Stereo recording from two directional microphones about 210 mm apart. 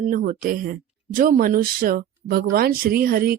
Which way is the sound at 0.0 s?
40° right (ahead or behind).